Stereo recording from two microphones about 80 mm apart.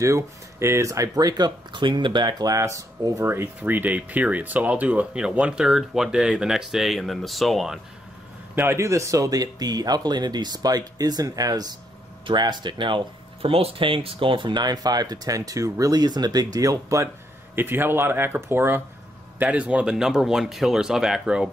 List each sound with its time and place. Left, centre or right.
0.0 s speech: right; by 7.8 s centre
8.5 s speech: right
12.3 s speech: right
17.6 s speech: right
19.3 s speech: centre